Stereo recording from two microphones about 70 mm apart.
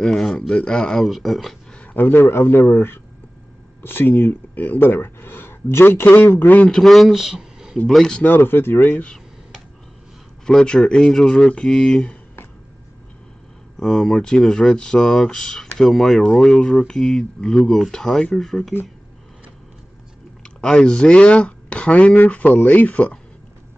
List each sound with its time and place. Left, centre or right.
0.0 s speech: centre
2.0 s speech: left
6.8 s speech: centre
7.7 s speech: centre
8.4 s speech: left
10.4 s speech: centre
13.7 s speech: centre
20.4 s speech: centre